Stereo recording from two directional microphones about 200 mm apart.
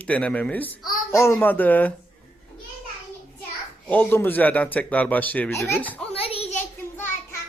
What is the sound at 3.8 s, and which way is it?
Speech, 10° left (ahead or behind).